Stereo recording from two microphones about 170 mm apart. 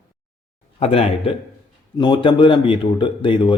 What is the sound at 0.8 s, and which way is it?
Speech, 35° left (ahead or behind).